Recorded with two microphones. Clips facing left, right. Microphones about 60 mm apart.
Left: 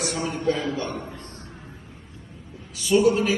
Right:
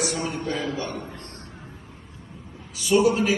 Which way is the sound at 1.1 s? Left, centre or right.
Right.